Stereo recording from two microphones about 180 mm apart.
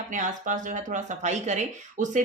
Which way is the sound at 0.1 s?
45° right (ahead or behind).